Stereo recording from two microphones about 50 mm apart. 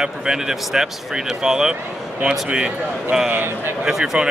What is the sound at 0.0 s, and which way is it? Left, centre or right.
Speech, centre.